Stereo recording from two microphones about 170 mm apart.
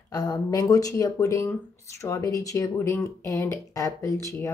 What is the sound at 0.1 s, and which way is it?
Speech, 20° left (ahead or behind).